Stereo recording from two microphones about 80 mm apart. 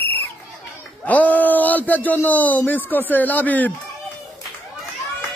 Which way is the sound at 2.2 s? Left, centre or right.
Left.